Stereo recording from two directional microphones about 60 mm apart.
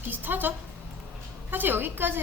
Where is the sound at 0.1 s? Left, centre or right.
Right.